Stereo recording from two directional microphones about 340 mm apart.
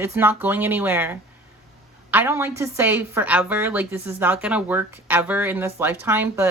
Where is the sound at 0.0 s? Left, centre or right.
Centre.